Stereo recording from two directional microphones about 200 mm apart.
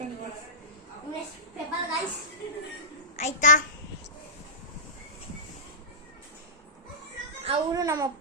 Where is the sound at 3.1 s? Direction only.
35° left (ahead or behind).